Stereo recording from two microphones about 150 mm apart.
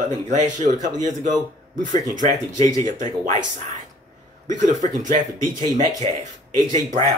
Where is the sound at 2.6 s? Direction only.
25° left (ahead or behind).